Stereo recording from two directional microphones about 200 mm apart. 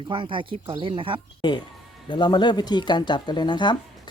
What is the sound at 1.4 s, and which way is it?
A woman's voice, 20° left (ahead or behind).